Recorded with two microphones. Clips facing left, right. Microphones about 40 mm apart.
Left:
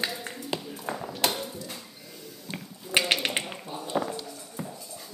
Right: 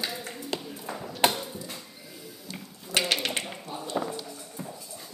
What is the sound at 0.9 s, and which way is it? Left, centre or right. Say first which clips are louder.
Ping: left 2 dB; centre.